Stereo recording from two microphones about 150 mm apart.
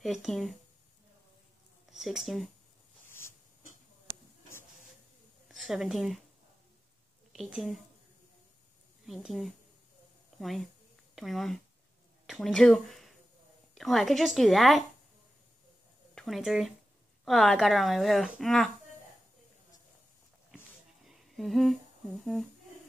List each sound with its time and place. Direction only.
0.0 s speech: centre (ahead or behind)
1.9 s speech: centre (ahead or behind)
3.1 s a sound: 15° left (ahead or behind)
5.5 s a woman's voice: centre (ahead or behind)
7.3 s speech: 5° right (ahead or behind)
9.0 s speech: centre (ahead or behind)
16.2 s speech: centre (ahead or behind)
21.0 s humming: centre (ahead or behind)